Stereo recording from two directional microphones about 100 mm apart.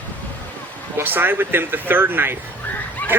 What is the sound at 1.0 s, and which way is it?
A woman's voice, 20° right (ahead or behind).